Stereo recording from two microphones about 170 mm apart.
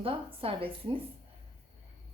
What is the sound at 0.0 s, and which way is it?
Speech, 35° right (ahead or behind).